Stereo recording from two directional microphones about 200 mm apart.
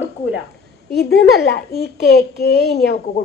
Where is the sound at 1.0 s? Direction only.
55° left (ahead or behind).